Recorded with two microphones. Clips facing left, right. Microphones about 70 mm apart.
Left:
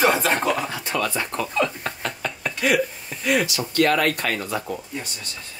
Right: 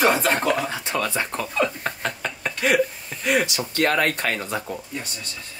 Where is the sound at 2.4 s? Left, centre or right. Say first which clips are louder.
Right 1 dB; right.